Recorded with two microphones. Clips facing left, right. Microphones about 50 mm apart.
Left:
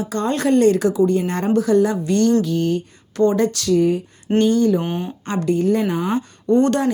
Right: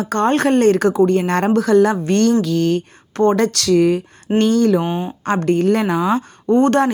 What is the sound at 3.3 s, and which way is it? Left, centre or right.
Speech, right.